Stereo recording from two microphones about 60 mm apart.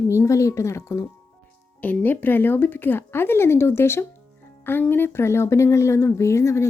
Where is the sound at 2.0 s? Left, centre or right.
Left.